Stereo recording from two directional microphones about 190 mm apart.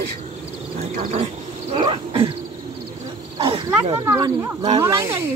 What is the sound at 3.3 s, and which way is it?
Wild animals, 25° right (ahead or behind).